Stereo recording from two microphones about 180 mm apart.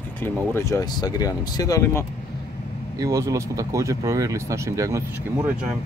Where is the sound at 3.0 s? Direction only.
15° right (ahead or behind).